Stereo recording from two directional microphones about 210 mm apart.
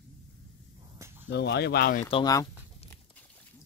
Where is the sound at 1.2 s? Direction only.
55° left (ahead or behind).